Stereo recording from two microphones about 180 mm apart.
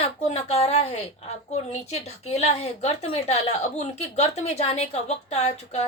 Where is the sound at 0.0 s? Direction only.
35° left (ahead or behind).